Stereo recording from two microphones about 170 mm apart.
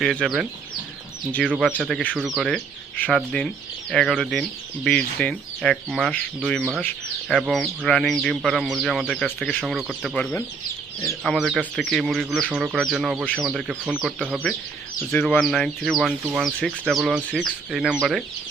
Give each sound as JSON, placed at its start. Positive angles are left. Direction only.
{"t": 0.0, "sound": "speech", "side_deg": 5}